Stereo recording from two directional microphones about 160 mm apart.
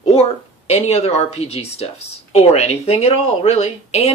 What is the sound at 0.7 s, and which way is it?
Speech, 40° left (ahead or behind).